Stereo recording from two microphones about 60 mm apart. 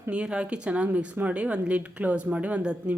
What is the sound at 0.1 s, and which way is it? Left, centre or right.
Speech, centre.